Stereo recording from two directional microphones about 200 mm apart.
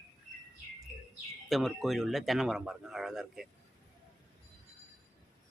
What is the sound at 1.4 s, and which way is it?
A man's voice, centre (ahead or behind).